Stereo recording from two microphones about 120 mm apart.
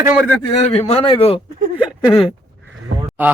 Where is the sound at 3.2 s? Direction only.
15° right (ahead or behind).